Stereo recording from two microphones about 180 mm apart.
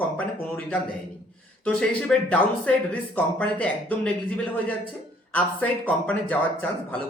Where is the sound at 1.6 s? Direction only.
5° left (ahead or behind).